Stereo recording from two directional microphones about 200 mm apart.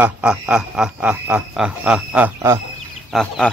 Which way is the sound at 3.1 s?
Centre (ahead or behind).